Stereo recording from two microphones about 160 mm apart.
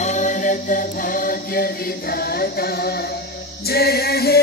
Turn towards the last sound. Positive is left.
turn(degrees=75)  # may be behind; listen again after turning